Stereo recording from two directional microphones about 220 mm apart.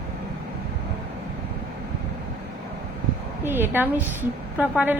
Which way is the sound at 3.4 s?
10° right (ahead or behind).